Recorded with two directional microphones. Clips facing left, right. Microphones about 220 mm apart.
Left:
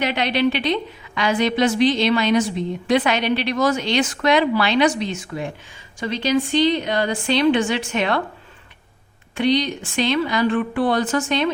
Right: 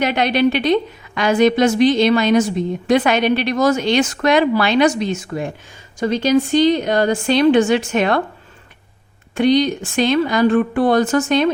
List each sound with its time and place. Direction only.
0.0 s a woman's voice: 45° right (ahead or behind)
9.3 s a woman's voice: 45° right (ahead or behind)